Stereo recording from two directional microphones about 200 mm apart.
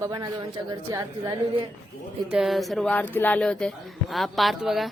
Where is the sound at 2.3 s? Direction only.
Centre (ahead or behind).